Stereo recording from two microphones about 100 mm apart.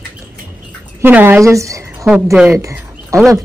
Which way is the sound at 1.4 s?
30° right (ahead or behind).